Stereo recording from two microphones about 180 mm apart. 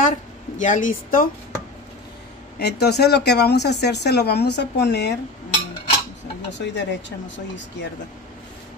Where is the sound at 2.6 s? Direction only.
65° left (ahead or behind).